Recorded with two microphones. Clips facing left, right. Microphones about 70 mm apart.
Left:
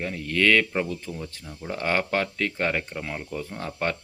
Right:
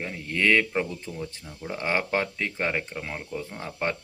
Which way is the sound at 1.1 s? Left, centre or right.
Centre.